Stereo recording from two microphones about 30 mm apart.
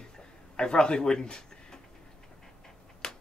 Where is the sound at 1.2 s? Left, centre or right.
Left.